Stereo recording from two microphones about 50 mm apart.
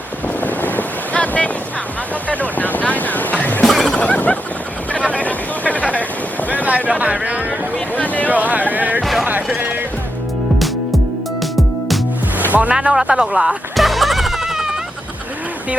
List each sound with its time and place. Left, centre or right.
0.4 s boat: left
2.3 s vehicle: left
3.7 s a sound: centre
3.9 s a sound: left
6.7 s speech: right
7.9 s a sound: left
8.3 s speech: right
12.5 s music: right
12.7 s speech: centre
13.7 s music: centre